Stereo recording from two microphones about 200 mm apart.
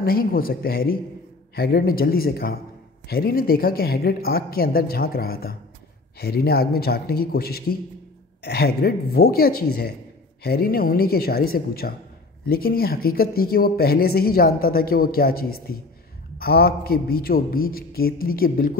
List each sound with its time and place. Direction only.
0.0 s speech: 45° left (ahead or behind)